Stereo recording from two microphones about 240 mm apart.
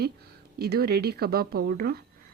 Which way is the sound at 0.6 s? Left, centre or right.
Right.